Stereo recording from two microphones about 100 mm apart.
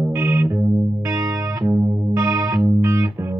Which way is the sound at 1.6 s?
25° right (ahead or behind).